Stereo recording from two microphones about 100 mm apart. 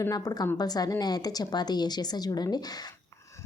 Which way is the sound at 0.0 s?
40° left (ahead or behind).